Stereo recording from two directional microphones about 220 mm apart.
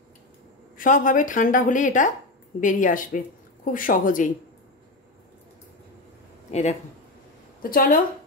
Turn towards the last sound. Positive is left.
turn(degrees=40)  # may be behind; listen again after turning